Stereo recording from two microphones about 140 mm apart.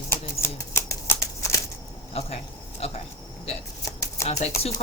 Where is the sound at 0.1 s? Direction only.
20° left (ahead or behind).